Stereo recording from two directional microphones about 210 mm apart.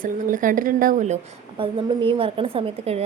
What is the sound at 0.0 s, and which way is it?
A woman's voice, 40° right (ahead or behind).